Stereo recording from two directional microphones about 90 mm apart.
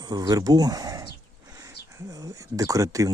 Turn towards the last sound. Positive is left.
turn(degrees=-40)  # may be behind; listen again after turning